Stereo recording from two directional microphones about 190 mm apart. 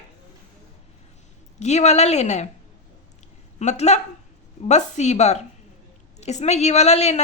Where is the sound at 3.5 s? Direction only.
35° left (ahead or behind).